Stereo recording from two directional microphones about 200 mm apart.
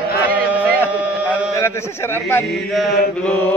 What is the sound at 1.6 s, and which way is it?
A man's voice, 15° left (ahead or behind).